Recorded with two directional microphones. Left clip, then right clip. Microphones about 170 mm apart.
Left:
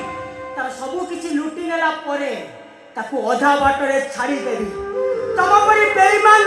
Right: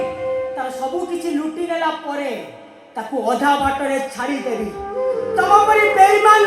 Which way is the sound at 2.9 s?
25° right (ahead or behind).